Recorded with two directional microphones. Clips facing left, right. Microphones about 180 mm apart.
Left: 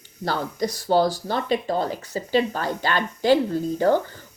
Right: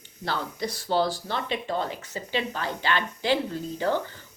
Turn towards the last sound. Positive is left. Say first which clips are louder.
# left 7 dB
turn(degrees=45)  # may be behind; listen again after turning